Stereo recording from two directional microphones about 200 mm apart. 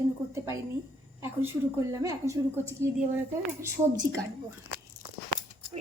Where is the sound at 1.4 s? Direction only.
15° right (ahead or behind).